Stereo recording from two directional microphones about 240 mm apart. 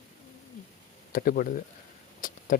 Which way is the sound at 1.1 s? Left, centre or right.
Left.